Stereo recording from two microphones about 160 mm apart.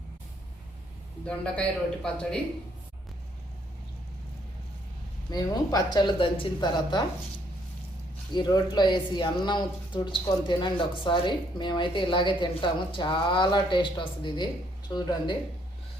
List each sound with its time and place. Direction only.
1.2 s speech: 5° left (ahead or behind)
5.3 s speech: 25° left (ahead or behind)
8.3 s speech: 25° left (ahead or behind)